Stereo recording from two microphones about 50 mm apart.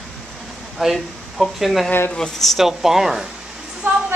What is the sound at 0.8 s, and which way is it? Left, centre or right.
Speech, centre.